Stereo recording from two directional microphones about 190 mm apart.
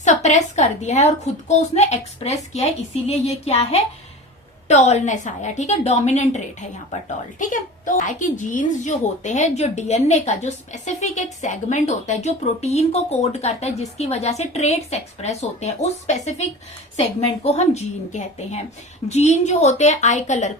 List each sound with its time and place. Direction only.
0.0 s a woman's voice: 35° left (ahead or behind)